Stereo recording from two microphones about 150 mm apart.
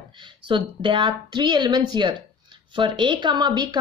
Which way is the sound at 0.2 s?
30° right (ahead or behind).